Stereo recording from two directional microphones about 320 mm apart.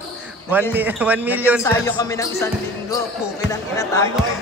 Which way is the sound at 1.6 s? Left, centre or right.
Centre.